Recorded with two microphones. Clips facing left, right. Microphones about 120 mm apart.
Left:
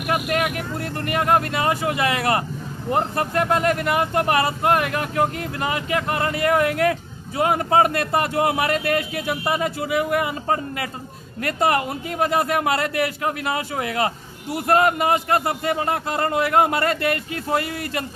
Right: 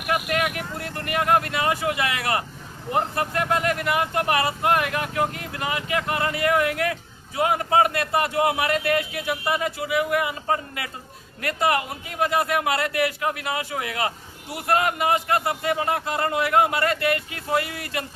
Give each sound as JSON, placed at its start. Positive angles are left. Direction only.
{"t": 0.1, "sound": "speech", "side_deg": 35}